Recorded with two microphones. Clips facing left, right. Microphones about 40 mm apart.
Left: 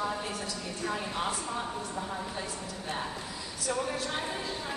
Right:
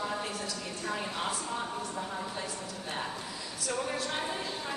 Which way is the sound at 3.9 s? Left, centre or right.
Centre.